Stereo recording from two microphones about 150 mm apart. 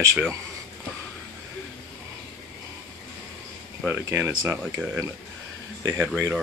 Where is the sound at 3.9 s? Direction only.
15° right (ahead or behind).